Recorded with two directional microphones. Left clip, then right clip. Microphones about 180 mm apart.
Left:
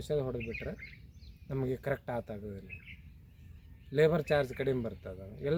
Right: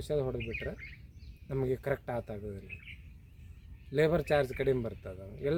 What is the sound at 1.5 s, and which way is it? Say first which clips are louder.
Speech: right 2 dB; 10° right (ahead or behind).